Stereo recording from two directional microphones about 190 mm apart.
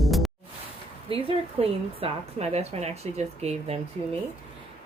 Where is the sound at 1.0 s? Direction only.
30° right (ahead or behind).